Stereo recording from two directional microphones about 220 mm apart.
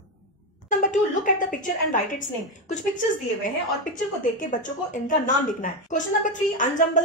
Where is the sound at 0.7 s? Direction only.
35° left (ahead or behind).